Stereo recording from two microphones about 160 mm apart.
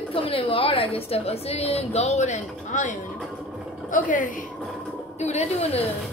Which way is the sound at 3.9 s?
55° left (ahead or behind).